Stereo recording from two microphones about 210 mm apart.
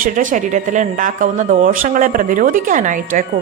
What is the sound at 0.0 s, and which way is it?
Speech, 40° right (ahead or behind).